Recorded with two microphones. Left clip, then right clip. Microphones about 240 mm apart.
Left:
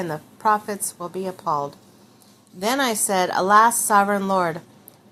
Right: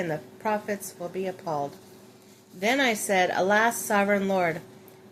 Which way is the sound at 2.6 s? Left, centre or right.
Centre.